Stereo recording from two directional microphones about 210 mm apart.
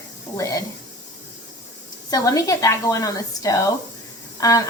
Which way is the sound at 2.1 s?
15° left (ahead or behind).